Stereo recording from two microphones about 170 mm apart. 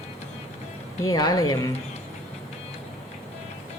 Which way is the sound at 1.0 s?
25° left (ahead or behind).